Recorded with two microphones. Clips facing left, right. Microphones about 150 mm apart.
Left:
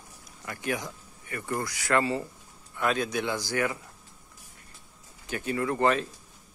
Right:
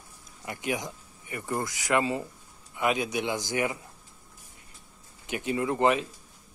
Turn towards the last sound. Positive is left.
turn(degrees=-15)  # may be behind; listen again after turning